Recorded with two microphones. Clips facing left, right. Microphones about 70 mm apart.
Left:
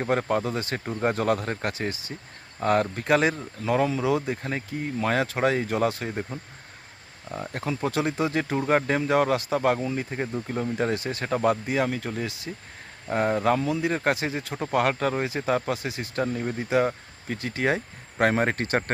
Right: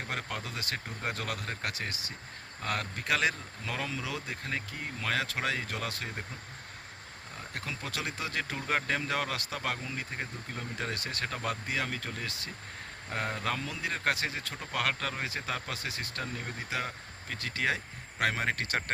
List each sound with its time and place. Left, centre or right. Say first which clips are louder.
0.0 s speech: left 13 dB; left
7.5 s speech: left 11 dB; left
10.3 s speech: left 11 dB; left